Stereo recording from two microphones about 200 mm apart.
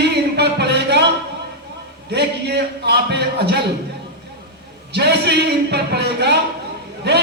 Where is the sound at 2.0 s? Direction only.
55° right (ahead or behind).